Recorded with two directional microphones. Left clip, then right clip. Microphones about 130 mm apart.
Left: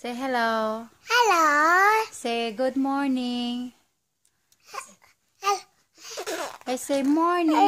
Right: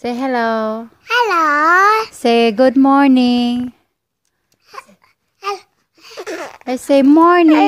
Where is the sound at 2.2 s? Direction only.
60° right (ahead or behind).